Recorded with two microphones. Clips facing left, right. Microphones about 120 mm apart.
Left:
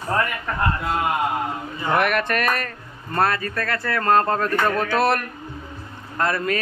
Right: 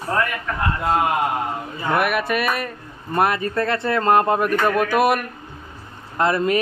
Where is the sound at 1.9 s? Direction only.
5° right (ahead or behind).